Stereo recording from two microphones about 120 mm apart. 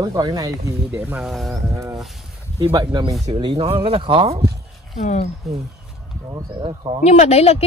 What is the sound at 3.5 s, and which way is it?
Speech, 50° right (ahead or behind).